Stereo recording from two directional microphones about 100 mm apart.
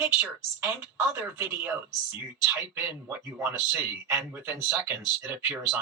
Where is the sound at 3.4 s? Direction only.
25° right (ahead or behind).